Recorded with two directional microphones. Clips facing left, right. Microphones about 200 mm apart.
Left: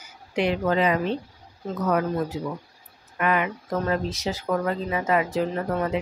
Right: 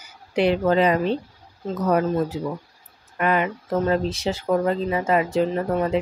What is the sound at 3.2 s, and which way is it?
Speech, 30° right (ahead or behind).